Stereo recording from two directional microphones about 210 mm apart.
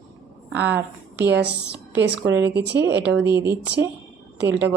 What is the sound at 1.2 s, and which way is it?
A woman's voice, 55° right (ahead or behind).